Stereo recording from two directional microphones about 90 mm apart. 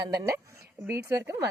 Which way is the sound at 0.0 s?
45° right (ahead or behind).